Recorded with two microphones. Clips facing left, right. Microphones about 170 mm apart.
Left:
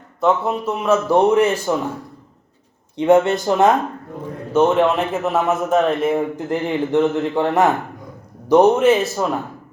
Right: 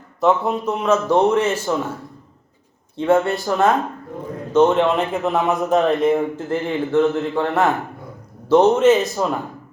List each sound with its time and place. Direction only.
0.2 s a man's voice: centre (ahead or behind)
2.9 s speech: 20° left (ahead or behind)
4.5 s a man's voice: 5° left (ahead or behind)
6.3 s a man's voice: 15° left (ahead or behind)